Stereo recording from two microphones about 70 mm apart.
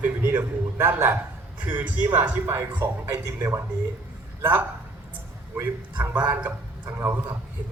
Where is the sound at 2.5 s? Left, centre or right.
Right.